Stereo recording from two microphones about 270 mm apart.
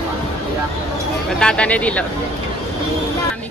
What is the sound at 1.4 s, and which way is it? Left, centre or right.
Speech, centre.